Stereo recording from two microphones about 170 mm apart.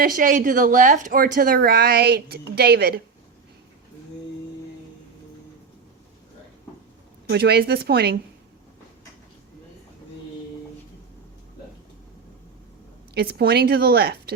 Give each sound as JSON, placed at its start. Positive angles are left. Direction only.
{"t": 0.0, "sound": "speech", "side_deg": -55}
{"t": 7.3, "sound": "a woman's voice", "side_deg": -70}
{"t": 13.1, "sound": "a woman's voice", "side_deg": -70}